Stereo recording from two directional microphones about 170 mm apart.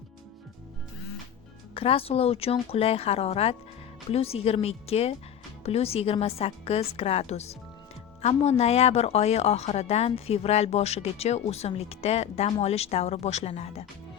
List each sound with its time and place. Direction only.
1.7 s speech: 35° left (ahead or behind)